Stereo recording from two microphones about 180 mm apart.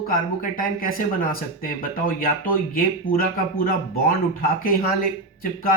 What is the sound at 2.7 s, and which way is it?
Speech, 55° left (ahead or behind).